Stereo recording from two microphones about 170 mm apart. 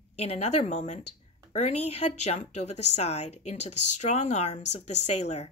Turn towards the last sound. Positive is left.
turn(degrees=40)  # may be behind; listen again after turning